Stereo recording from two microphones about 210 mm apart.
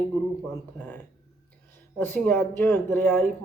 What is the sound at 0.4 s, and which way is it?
Speech, 10° left (ahead or behind).